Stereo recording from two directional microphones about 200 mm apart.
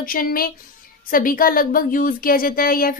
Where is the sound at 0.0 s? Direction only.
45° left (ahead or behind).